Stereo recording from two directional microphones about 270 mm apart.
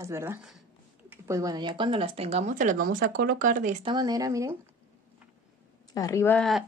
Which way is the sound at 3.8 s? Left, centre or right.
Centre.